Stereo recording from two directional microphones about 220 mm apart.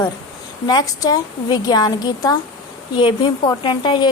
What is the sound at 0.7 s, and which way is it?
A woman's voice, 15° left (ahead or behind).